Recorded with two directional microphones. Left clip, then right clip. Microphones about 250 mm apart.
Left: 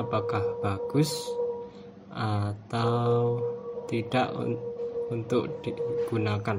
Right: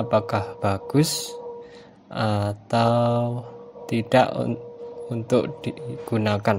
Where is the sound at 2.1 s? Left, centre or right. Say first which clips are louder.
Right 8 dB; right.